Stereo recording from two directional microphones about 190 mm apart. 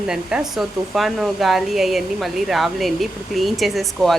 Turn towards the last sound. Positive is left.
turn(degrees=0)  # may be behind; listen again after turning